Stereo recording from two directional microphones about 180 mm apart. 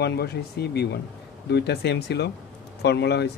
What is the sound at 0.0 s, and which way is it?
Speech, 65° left (ahead or behind).